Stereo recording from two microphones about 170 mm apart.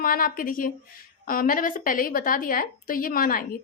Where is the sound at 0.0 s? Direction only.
55° left (ahead or behind).